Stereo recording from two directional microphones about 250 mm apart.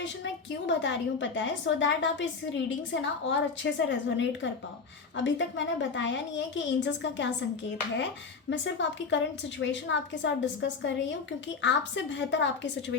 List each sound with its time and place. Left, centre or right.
0.7 s a woman's voice: left
8.4 s a woman's voice: left